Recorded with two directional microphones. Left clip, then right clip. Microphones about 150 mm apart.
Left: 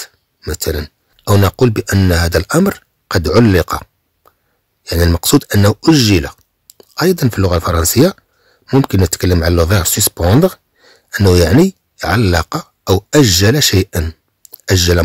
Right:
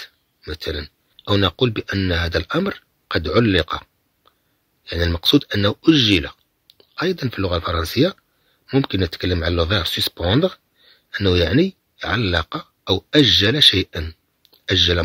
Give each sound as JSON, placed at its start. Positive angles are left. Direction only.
{"t": 0.0, "sound": "speech", "side_deg": 55}
{"t": 2.7, "sound": "a sound", "side_deg": 55}
{"t": 4.8, "sound": "speech", "side_deg": 55}